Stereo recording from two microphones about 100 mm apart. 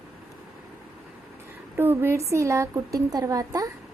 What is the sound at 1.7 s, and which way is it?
A woman's voice, 20° right (ahead or behind).